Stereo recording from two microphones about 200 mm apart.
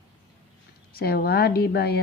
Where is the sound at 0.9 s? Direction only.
50° left (ahead or behind).